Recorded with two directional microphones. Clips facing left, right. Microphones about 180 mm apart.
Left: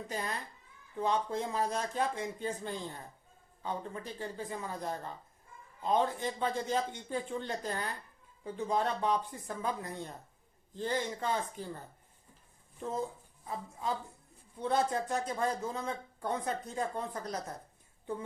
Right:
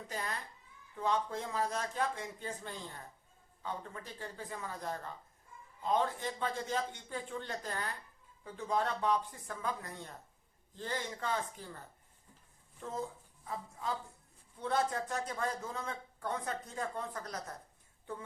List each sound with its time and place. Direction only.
0.1 s speech: 20° left (ahead or behind)
12.8 s speech: 20° left (ahead or behind)
14.6 s speech: 20° left (ahead or behind)